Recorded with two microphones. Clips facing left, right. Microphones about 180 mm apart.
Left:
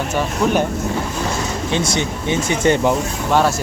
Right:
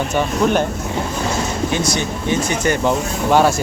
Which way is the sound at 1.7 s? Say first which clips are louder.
Even; 25° left (ahead or behind).